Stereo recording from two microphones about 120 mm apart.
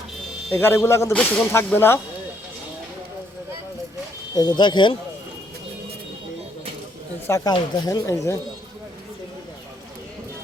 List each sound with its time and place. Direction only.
0.5 s speech: 20° left (ahead or behind)
1.1 s speech: 10° left (ahead or behind)
4.4 s speech: 40° left (ahead or behind)
7.3 s speech: 25° left (ahead or behind)